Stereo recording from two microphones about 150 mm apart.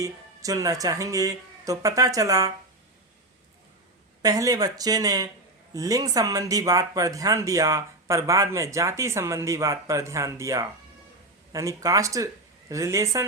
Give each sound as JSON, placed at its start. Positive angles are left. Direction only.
{"t": 0.0, "sound": "speech", "side_deg": -20}
{"t": 4.2, "sound": "speech", "side_deg": -25}